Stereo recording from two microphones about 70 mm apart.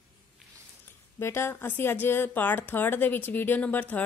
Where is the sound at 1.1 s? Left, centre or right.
Left.